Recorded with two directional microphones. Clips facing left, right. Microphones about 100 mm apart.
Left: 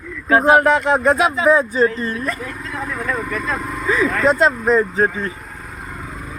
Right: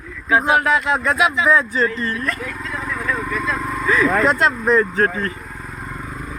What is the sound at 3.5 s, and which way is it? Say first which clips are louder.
Speech: right 1 dB; 25° left (ahead or behind).